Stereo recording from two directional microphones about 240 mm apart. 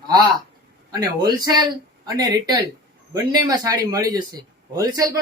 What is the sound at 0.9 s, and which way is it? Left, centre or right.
Speech, centre.